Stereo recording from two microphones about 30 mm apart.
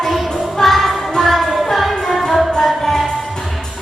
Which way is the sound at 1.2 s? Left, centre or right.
Centre.